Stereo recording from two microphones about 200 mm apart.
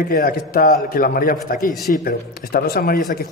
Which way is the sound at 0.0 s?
45° left (ahead or behind).